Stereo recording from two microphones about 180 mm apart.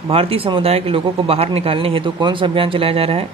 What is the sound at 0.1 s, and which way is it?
A man's voice, 30° right (ahead or behind).